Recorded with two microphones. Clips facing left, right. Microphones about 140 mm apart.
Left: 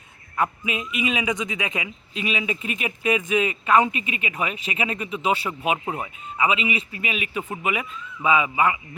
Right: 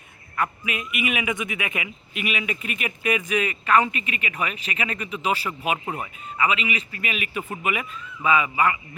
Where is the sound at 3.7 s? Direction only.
15° left (ahead or behind).